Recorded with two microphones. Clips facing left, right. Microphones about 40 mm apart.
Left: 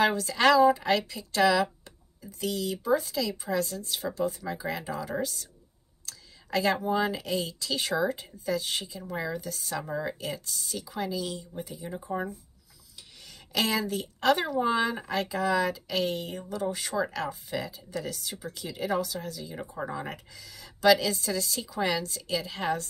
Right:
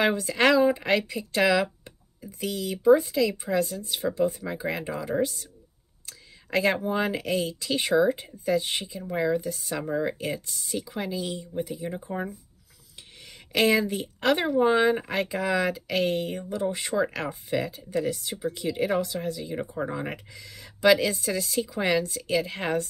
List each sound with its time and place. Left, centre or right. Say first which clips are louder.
0.0 s speech: right 1 dB; right
6.0 s whispering: right 1 dB; right
6.8 s speech: right 1 dB; right
10.1 s speech: right 4 dB; right
13.2 s speech: right 5 dB; right
16.4 s speech: right 3 dB; right
17.1 s speech: right 4 dB; right
19.7 s speech: right 4 dB; centre; by 22.8 s right